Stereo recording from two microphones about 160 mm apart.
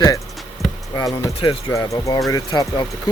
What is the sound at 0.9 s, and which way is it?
Speech, 25° left (ahead or behind).